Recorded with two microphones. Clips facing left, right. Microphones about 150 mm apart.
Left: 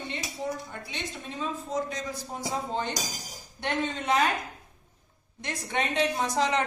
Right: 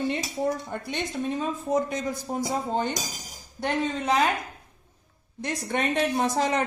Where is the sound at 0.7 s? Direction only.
55° right (ahead or behind); by 4.2 s 35° right (ahead or behind).